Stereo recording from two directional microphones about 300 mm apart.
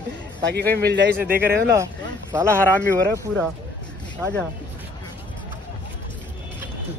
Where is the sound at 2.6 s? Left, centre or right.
Centre.